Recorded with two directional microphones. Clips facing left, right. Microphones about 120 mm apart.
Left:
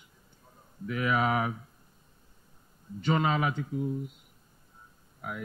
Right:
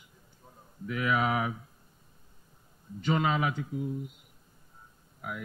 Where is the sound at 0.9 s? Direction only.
40° left (ahead or behind).